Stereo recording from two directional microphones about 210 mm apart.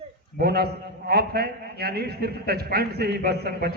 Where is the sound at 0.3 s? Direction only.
50° right (ahead or behind).